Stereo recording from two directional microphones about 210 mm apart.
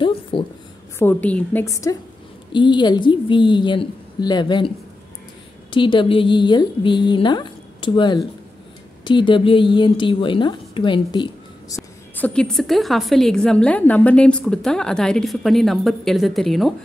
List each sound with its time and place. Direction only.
0.3 s a woman's voice: 25° left (ahead or behind)
0.9 s a woman's voice: 10° left (ahead or behind)
11.7 s a woman's voice: 5° left (ahead or behind)